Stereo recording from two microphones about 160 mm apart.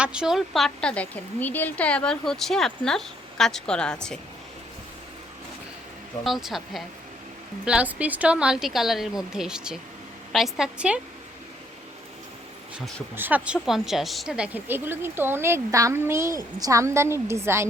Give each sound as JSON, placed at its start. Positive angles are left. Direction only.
{"t": 0.0, "sound": "speech", "side_deg": -5}
{"t": 6.2, "sound": "speech", "side_deg": 0}
{"t": 13.1, "sound": "a woman's voice", "side_deg": -10}